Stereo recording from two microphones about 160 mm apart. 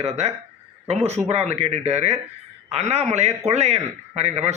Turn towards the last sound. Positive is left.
turn(degrees=-45)  # may be behind; listen again after turning